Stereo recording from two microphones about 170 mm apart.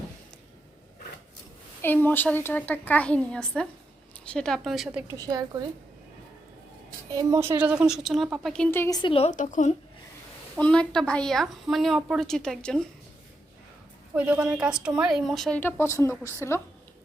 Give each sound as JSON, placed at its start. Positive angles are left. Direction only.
{"t": 1.8, "sound": "a woman's voice", "side_deg": 10}
{"t": 5.1, "sound": "a woman's voice", "side_deg": -20}
{"t": 7.1, "sound": "a woman's voice", "side_deg": -20}
{"t": 9.0, "sound": "a woman's voice", "side_deg": 30}
{"t": 10.6, "sound": "a woman's voice", "side_deg": 5}
{"t": 14.2, "sound": "a woman's voice", "side_deg": -10}